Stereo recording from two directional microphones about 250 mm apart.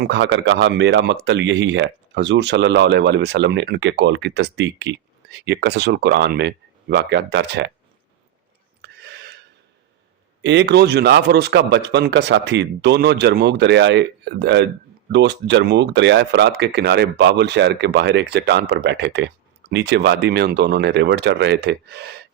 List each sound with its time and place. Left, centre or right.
0.0 s speech: right
8.8 s a sound: right
10.4 s speech: right